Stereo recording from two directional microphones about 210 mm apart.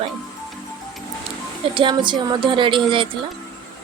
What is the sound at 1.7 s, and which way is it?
A woman's voice, 25° right (ahead or behind).